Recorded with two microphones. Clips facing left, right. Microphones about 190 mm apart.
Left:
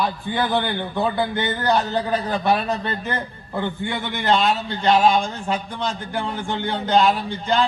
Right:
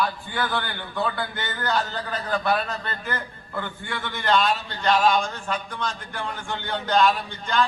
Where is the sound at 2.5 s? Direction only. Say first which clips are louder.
Left 5 dB; 20° left (ahead or behind).